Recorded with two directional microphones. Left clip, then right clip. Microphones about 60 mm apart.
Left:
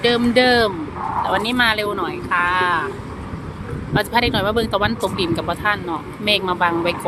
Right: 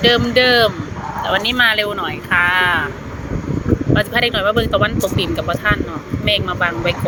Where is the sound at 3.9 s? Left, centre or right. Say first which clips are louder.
Right 1 dB; left.